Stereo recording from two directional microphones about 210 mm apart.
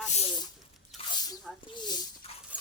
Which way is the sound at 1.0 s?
25° left (ahead or behind).